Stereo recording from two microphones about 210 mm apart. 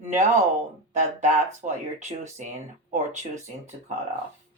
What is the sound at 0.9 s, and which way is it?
Speech, 35° right (ahead or behind).